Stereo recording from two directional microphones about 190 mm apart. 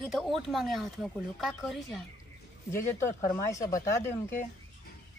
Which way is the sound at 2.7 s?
15° left (ahead or behind).